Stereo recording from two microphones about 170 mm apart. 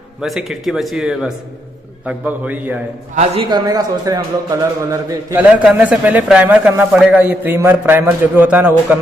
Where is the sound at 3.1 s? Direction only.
40° right (ahead or behind).